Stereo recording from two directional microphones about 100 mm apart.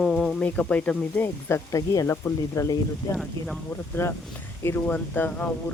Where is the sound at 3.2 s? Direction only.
Centre (ahead or behind).